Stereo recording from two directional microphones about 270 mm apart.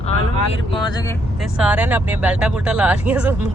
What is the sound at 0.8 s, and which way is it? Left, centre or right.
Speech, centre.